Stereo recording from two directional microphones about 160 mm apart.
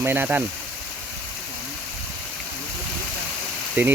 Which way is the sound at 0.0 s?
15° right (ahead or behind).